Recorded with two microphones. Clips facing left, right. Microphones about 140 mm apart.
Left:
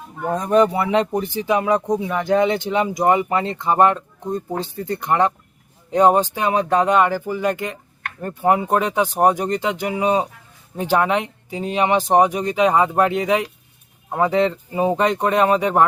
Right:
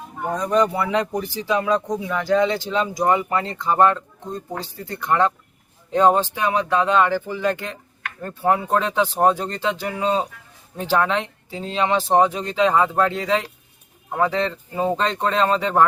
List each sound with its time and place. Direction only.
0.6 s speech: 25° left (ahead or behind)
6.6 s speech: 45° left (ahead or behind)
6.8 s speech: 15° left (ahead or behind)